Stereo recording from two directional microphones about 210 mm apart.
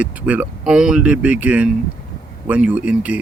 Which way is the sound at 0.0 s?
5° right (ahead or behind).